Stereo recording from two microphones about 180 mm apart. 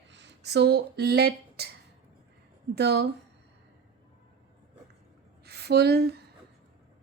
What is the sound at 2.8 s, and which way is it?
Speech, 65° right (ahead or behind).